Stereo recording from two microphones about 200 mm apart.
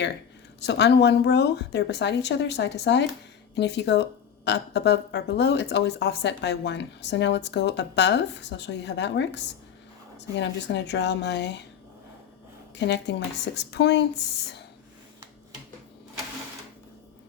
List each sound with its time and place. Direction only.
0.6 s speech: 60° left (ahead or behind)
12.7 s speech: 60° left (ahead or behind)